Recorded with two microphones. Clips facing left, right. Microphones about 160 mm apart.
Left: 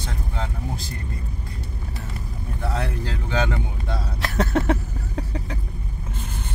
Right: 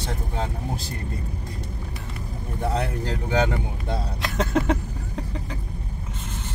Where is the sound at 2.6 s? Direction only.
20° right (ahead or behind).